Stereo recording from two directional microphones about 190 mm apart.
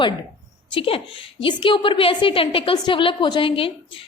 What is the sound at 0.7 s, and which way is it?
A woman's voice, 30° left (ahead or behind).